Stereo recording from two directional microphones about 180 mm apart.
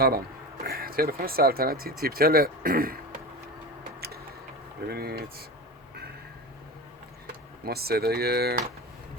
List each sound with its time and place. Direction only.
0.6 s speech: 55° right (ahead or behind)
4.9 s speech: 60° right (ahead or behind)
7.6 s speech: 60° right (ahead or behind)